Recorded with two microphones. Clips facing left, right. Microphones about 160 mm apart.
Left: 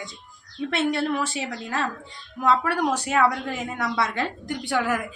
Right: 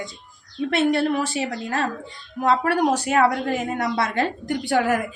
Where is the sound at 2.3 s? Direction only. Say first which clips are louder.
Right 3 dB; 40° right (ahead or behind).